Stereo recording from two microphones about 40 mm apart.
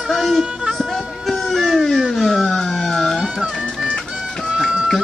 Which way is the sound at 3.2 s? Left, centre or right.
Centre.